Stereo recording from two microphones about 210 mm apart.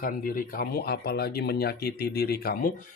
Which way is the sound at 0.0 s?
45° left (ahead or behind).